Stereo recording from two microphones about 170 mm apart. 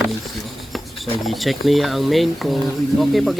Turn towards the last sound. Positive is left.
turn(degrees=0)  # may be behind; listen again after turning